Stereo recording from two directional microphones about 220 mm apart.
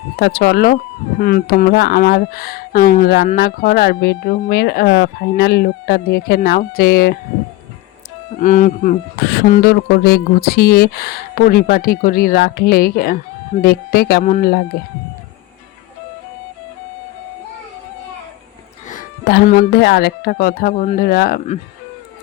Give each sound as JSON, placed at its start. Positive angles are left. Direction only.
{"t": 0.2, "sound": "speech", "side_deg": 50}
{"t": 8.4, "sound": "speech", "side_deg": 35}
{"t": 9.3, "sound": "speech", "side_deg": 45}
{"t": 18.9, "sound": "music", "side_deg": 35}
{"t": 19.5, "sound": "speech", "side_deg": 45}